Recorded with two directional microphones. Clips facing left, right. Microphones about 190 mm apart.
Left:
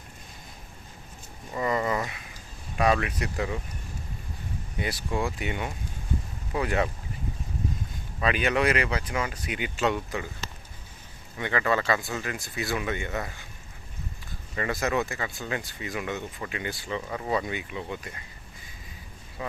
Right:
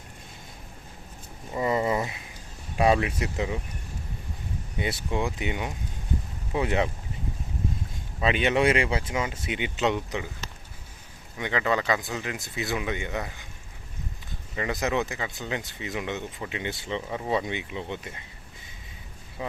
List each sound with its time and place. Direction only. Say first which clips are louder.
1.5 s speech: right 2 dB; 20° right (ahead or behind)
4.8 s speech: right 1 dB; 25° right (ahead or behind)
8.2 s speech: right 2 dB; 25° right (ahead or behind)
11.3 s speech: even; 15° right (ahead or behind)
14.5 s speech: even; 15° right (ahead or behind)
19.4 s speech: right 1 dB; 15° right (ahead or behind)